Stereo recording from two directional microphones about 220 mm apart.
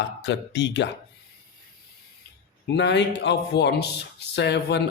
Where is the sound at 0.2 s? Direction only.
50° left (ahead or behind).